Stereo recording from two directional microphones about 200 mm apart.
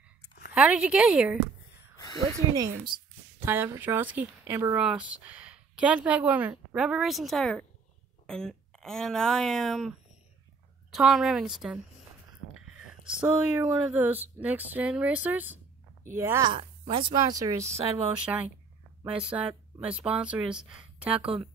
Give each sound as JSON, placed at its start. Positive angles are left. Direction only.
{"t": 0.6, "sound": "speech", "side_deg": -5}
{"t": 3.3, "sound": "speech", "side_deg": -10}